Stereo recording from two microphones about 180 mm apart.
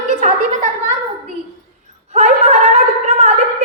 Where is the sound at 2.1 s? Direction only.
35° right (ahead or behind).